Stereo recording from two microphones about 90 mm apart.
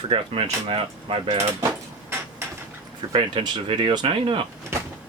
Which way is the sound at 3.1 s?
80° right.